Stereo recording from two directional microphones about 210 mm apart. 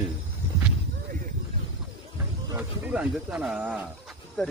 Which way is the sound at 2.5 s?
10° right (ahead or behind).